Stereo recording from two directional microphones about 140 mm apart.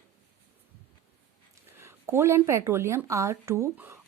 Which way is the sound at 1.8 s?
20° right (ahead or behind).